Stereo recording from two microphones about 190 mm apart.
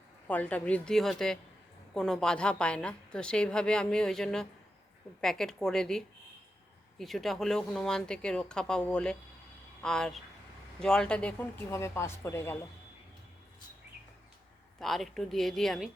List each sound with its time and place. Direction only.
0.3 s a woman's voice: 10° left (ahead or behind)
14.8 s a woman's voice: centre (ahead or behind)